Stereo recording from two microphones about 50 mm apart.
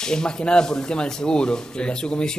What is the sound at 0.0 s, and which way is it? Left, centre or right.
Speech, centre.